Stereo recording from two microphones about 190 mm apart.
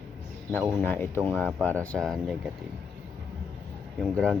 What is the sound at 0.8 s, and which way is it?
Speech, 10° left (ahead or behind).